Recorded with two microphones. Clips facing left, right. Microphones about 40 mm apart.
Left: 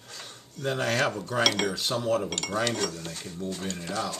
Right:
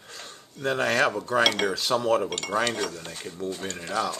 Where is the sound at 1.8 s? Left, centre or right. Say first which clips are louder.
Right 6 dB; right.